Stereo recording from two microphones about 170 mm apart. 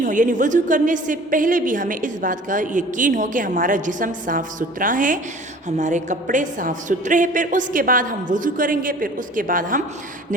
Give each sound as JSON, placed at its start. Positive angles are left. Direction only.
{"t": 0.0, "sound": "a woman's voice", "side_deg": -50}